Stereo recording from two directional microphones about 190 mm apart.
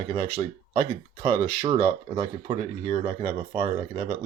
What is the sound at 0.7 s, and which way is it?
Speech, 25° right (ahead or behind).